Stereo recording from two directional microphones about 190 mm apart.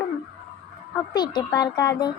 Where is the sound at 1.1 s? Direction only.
20° left (ahead or behind).